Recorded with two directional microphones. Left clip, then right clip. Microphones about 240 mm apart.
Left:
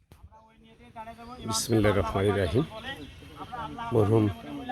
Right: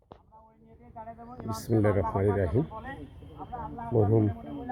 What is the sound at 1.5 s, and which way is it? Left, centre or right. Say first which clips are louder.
Speech: left 2 dB; centre.